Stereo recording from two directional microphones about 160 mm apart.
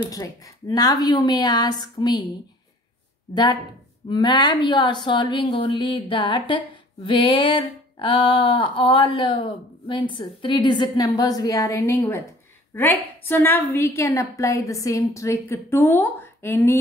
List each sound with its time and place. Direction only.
0.0 s speech: 25° left (ahead or behind)
4.1 s a woman's voice: 25° left (ahead or behind)